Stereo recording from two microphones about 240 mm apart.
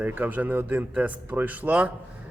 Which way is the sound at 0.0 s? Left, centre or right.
Centre.